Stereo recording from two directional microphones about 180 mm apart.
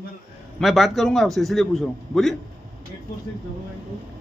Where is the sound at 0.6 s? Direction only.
Centre (ahead or behind).